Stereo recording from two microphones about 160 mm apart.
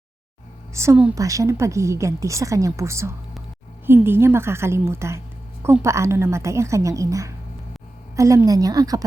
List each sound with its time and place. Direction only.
0.7 s a woman's voice: 15° right (ahead or behind)